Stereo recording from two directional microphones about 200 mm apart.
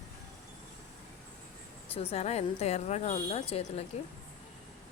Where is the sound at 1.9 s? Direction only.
30° left (ahead or behind).